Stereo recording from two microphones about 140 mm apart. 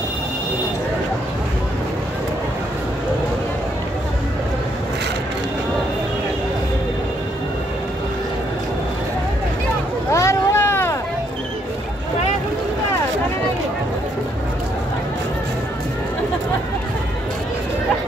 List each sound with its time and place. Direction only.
10.1 s vehicle: 20° left (ahead or behind)